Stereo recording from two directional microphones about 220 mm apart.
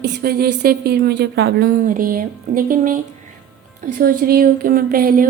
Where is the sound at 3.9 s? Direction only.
35° right (ahead or behind).